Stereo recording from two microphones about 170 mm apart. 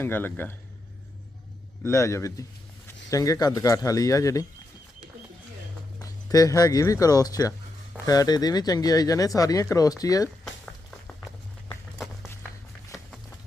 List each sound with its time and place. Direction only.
0.0 s speech: 10° left (ahead or behind)
1.8 s speech: 15° left (ahead or behind)
6.0 s speech: 20° left (ahead or behind)